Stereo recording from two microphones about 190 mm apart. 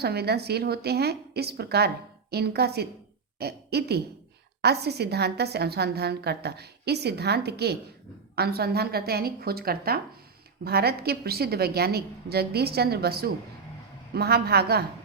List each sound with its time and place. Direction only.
0.0 s a woman's voice: 60° right (ahead or behind)